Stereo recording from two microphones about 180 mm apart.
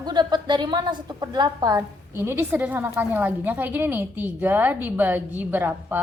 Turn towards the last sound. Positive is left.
turn(degrees=-10)  # may be behind; listen again after turning